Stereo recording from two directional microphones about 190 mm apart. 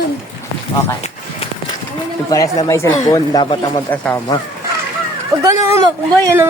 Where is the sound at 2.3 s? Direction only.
20° left (ahead or behind).